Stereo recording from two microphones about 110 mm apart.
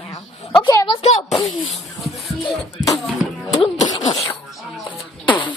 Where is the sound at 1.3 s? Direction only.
Centre (ahead or behind).